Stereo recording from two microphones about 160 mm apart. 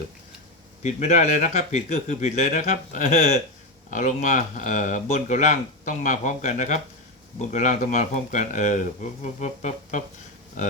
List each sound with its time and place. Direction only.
0.8 s speech: 45° left (ahead or behind)